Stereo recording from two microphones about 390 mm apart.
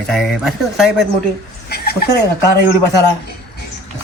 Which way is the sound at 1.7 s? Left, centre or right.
Left.